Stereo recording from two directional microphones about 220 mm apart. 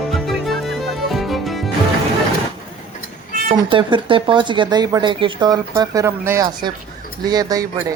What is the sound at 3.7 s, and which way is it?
Speech, 20° right (ahead or behind).